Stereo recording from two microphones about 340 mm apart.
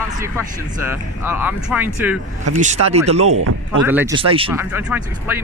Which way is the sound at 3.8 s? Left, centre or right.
Centre.